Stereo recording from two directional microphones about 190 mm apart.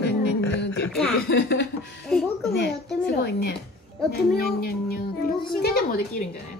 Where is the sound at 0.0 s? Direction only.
60° left (ahead or behind).